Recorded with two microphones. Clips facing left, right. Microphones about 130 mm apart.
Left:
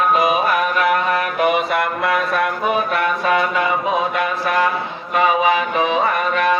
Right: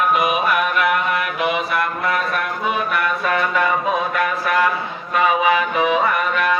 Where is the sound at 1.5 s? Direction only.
75° left (ahead or behind).